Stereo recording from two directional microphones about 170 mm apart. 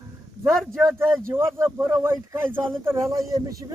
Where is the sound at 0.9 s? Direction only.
15° right (ahead or behind).